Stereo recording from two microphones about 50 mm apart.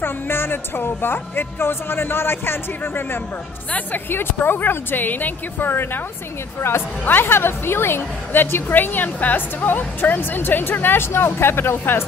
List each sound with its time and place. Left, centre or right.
0.0 s a woman's voice: left
7.1 s a woman's voice: left